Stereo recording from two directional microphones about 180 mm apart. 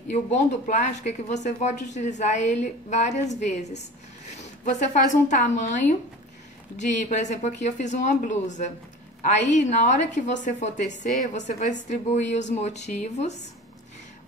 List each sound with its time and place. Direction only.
0.1 s a woman's voice: 40° left (ahead or behind)